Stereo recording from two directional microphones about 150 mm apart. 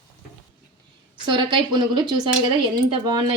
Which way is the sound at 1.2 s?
30° right (ahead or behind).